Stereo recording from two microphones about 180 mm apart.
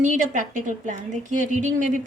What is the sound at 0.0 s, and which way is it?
A woman's voice, 45° right (ahead or behind).